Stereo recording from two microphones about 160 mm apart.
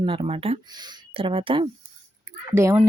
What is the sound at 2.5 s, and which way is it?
Speech, 15° right (ahead or behind).